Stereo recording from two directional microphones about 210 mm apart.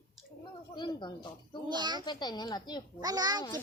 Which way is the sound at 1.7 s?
20° right (ahead or behind).